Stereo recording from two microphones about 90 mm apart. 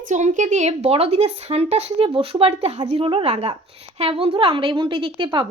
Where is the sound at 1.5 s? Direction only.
90° right.